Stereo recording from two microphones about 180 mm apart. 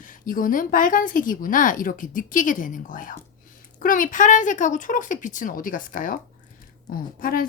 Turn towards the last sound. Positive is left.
turn(degrees=50)  # may be behind; listen again after turning